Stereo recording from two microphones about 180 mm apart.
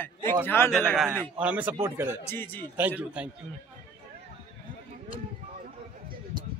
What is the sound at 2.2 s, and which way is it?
Speech, 10° left (ahead or behind).